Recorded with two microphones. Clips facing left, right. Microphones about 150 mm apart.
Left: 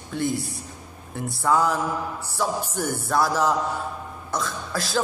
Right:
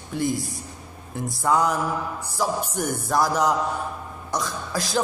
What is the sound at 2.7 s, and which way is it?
A man's voice, 15° right (ahead or behind).